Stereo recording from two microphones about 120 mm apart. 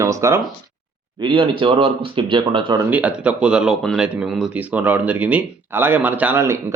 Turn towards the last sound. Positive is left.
turn(degrees=-20)  # may be behind; listen again after turning